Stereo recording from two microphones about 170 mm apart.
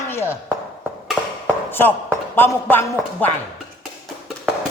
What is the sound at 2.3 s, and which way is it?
Speech, 10° left (ahead or behind).